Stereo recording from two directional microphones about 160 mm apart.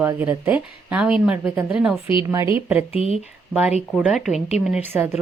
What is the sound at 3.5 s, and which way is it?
A woman's voice, 5° right (ahead or behind).